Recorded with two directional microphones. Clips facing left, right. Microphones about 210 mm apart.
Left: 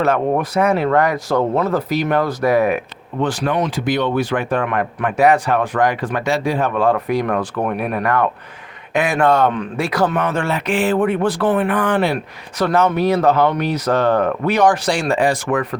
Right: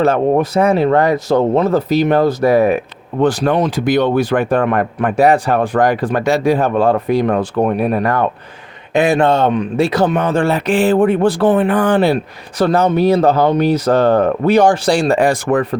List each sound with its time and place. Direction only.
0.0 s speech: 30° right (ahead or behind)